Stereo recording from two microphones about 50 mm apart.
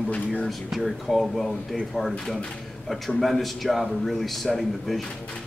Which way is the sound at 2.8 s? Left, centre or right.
Centre.